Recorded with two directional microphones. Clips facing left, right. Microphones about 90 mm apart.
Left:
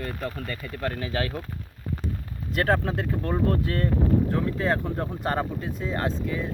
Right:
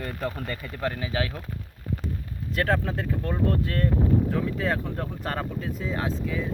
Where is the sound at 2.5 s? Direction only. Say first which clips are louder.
Left 2 dB; 5° left (ahead or behind).